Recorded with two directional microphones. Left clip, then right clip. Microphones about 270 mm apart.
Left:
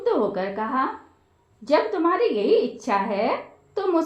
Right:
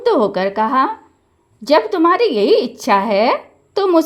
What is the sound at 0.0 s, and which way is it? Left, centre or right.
Speech, right.